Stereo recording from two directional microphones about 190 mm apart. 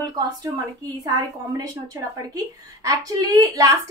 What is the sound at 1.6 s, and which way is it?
A woman's voice, 20° right (ahead or behind).